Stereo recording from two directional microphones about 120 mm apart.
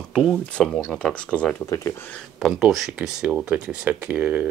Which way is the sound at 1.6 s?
25° left (ahead or behind).